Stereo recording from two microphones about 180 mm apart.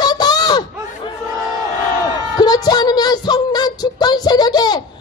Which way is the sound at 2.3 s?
20° left (ahead or behind).